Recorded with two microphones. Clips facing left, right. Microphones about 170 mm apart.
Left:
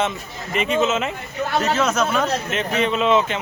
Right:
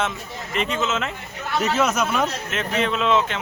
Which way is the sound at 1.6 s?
10° right (ahead or behind).